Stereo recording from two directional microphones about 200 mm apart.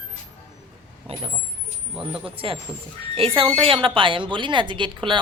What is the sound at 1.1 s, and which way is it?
A woman's voice, 30° right (ahead or behind).